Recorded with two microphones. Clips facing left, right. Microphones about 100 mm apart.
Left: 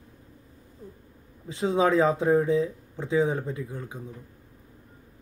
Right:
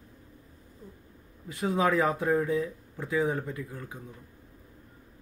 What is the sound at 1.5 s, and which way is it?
Speech, 25° left (ahead or behind).